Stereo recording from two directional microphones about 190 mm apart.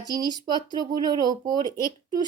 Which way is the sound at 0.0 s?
20° right (ahead or behind).